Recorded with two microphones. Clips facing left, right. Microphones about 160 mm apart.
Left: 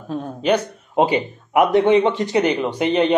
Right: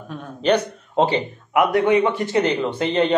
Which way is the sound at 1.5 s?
20° left (ahead or behind).